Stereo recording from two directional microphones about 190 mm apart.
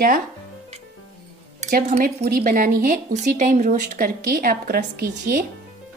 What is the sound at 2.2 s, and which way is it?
Speech, 50° right (ahead or behind).